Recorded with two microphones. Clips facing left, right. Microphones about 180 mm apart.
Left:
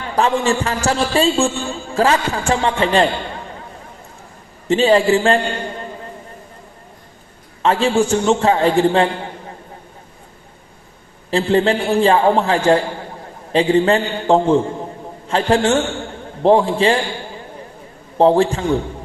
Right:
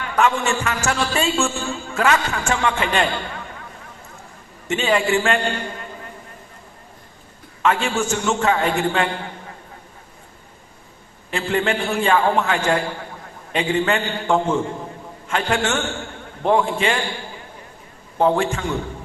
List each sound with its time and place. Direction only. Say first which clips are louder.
0.0 s a man's voice: left 3 dB; 30° left (ahead or behind)
4.7 s a man's voice: left 6 dB; 35° left (ahead or behind)
7.6 s a man's voice: left 5 dB; 30° left (ahead or behind)
11.3 s a man's voice: left 6 dB; 35° left (ahead or behind)
18.2 s a man's voice: left 5 dB; 30° left (ahead or behind)